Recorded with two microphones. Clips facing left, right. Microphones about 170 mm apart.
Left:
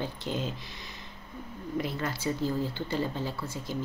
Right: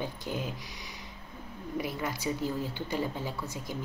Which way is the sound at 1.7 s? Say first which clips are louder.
Left 1 dB; 10° right (ahead or behind).